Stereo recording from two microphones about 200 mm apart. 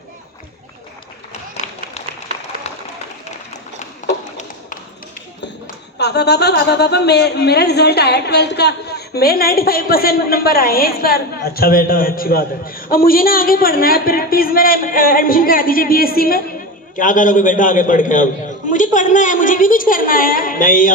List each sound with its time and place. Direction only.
5.6 s a man's voice: 55° left (ahead or behind)